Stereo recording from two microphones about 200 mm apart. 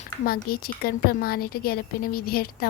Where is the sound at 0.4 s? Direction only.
50° left (ahead or behind).